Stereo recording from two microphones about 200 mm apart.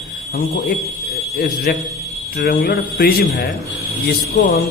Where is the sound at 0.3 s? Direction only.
45° left (ahead or behind).